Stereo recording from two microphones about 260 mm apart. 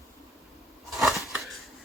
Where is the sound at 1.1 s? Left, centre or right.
Centre.